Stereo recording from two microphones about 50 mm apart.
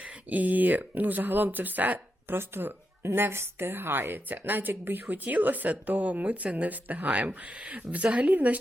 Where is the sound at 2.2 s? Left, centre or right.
Right.